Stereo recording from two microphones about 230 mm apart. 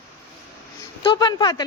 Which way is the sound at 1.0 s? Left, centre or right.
Centre.